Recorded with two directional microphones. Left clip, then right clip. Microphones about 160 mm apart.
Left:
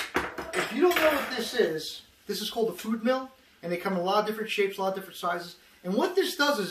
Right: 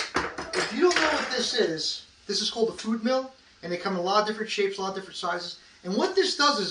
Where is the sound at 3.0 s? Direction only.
10° left (ahead or behind).